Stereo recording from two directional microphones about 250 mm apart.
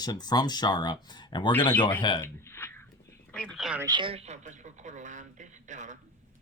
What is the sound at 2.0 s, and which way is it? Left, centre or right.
Speech, centre.